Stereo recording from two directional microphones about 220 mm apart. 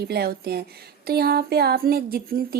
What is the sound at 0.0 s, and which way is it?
Speech, 45° right (ahead or behind).